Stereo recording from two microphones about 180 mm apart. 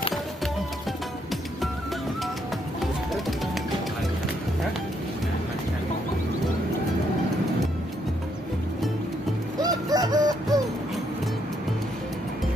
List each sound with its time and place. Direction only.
9.6 s music: 20° right (ahead or behind)